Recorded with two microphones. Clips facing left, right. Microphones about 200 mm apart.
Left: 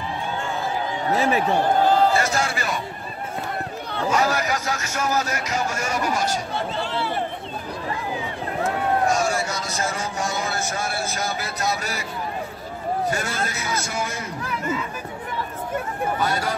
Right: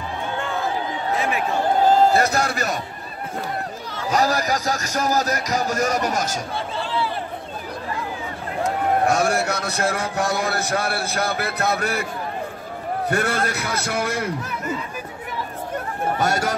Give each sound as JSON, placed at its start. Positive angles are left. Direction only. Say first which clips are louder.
{"t": 1.1, "sound": "speech", "louder": "left 4 dB", "side_deg": 40}
{"t": 1.9, "sound": "a sound", "louder": "right 2 dB", "side_deg": -40}
{"t": 2.4, "sound": "speech", "louder": "right 2 dB", "side_deg": -40}
{"t": 4.1, "sound": "speech", "louder": "right 2 dB", "side_deg": -35}
{"t": 9.0, "sound": "a man's voice", "louder": "right 2 dB", "side_deg": -60}
{"t": 13.1, "sound": "a man's voice", "louder": "right 5 dB", "side_deg": -60}
{"t": 16.2, "sound": "speech", "louder": "right 4 dB", "side_deg": -45}